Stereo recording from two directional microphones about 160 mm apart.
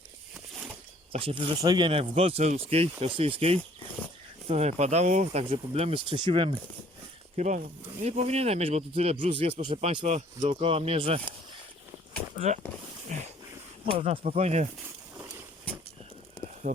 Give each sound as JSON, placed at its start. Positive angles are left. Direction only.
{"t": 1.1, "sound": "speech", "side_deg": -35}
{"t": 7.3, "sound": "speech", "side_deg": -50}
{"t": 12.3, "sound": "speech", "side_deg": -45}
{"t": 13.1, "sound": "a sound", "side_deg": -50}
{"t": 13.9, "sound": "speech", "side_deg": -35}
{"t": 16.6, "sound": "speech", "side_deg": -65}